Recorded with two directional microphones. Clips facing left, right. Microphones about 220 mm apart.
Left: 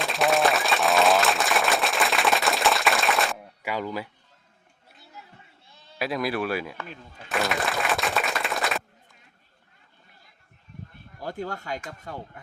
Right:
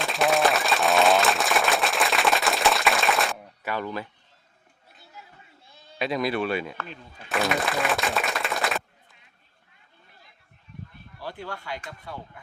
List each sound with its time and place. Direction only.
0.0 s applause: centre (ahead or behind)
3.6 s speech: 10° left (ahead or behind)
6.0 s speech: centre (ahead or behind)
11.2 s speech: 45° left (ahead or behind)